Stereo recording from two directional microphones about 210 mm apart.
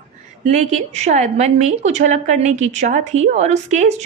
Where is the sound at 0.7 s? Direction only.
35° right (ahead or behind).